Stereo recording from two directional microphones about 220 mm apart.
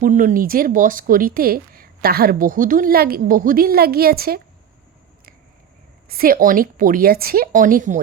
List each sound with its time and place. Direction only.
0.0 s speech: 35° right (ahead or behind)
6.1 s speech: 40° right (ahead or behind)